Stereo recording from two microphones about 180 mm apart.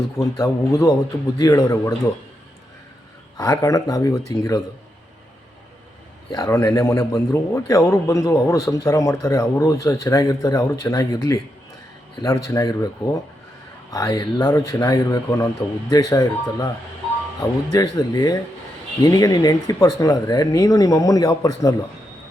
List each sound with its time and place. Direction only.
0.2 s a man's voice: 20° left (ahead or behind)
3.3 s speech: 20° left (ahead or behind)
6.3 s a man's voice: 15° left (ahead or behind)